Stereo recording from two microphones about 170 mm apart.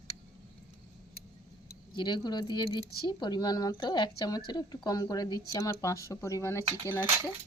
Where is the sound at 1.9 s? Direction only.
25° left (ahead or behind).